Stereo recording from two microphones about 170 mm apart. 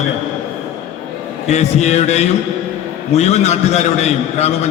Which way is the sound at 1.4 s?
40° left (ahead or behind).